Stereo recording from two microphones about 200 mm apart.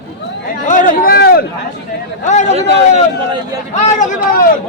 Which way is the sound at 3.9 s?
40° left (ahead or behind).